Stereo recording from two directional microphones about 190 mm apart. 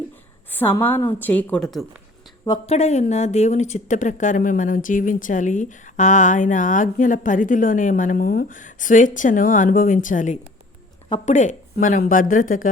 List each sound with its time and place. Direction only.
0.6 s a woman's voice: 10° left (ahead or behind)
2.6 s speech: 35° left (ahead or behind)